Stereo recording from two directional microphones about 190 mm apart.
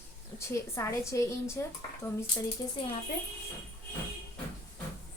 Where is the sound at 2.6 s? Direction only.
20° left (ahead or behind).